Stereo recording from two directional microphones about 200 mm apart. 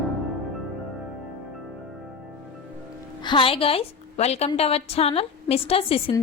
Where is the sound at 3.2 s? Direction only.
25° left (ahead or behind).